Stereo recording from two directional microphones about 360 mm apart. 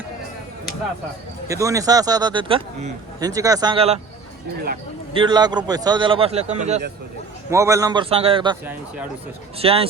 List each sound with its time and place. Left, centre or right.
1.5 s speech: centre
5.1 s speech: centre
7.5 s speech: centre